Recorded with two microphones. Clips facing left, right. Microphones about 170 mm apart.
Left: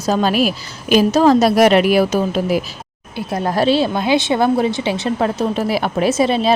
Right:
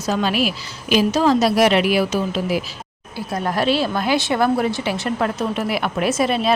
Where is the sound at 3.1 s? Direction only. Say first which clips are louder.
Left 4 dB; 30° left (ahead or behind).